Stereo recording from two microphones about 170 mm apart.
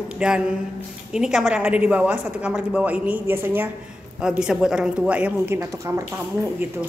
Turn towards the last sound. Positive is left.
turn(degrees=-15)  # may be behind; listen again after turning